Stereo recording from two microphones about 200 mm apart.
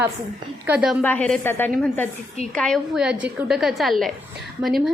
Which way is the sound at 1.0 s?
5° left (ahead or behind).